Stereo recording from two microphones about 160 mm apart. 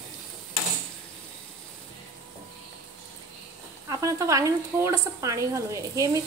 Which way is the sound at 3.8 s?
20° right (ahead or behind).